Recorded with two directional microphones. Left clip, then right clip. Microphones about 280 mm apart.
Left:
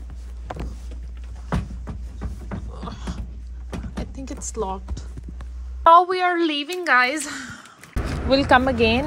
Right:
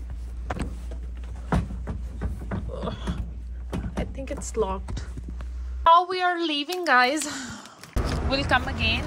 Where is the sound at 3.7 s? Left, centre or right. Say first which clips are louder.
Even; centre.